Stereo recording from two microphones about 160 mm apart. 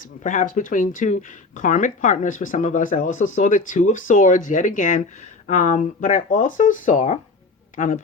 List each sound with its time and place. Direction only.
0.0 s speech: 55° left (ahead or behind)